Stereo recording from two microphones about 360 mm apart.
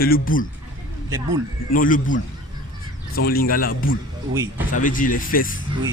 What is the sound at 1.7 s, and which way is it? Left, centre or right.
A man's voice, left.